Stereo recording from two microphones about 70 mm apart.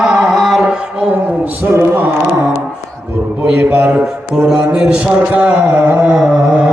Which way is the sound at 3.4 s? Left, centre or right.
Right.